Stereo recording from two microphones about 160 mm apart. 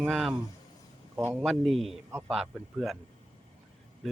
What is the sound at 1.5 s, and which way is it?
Speech, centre (ahead or behind).